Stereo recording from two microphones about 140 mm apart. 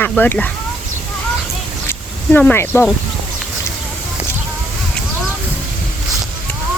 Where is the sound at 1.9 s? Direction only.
10° left (ahead or behind).